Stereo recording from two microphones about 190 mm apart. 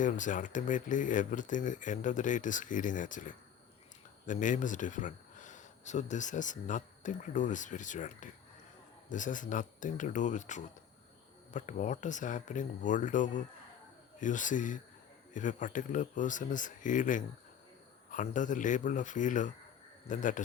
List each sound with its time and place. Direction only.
0.0 s speech: 40° left (ahead or behind)